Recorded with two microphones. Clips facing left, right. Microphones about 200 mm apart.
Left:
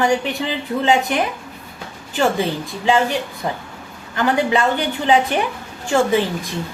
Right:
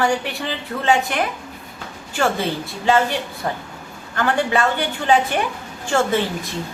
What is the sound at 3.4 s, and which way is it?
Speech, 15° left (ahead or behind).